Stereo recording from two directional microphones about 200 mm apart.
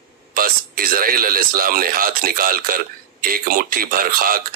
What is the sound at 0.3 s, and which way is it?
Speech, 45° right (ahead or behind).